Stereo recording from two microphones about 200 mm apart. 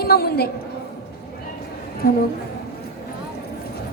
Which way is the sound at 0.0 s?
50° left (ahead or behind).